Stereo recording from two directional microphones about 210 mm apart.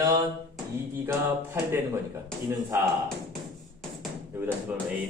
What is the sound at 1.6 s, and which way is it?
Speech, 10° right (ahead or behind).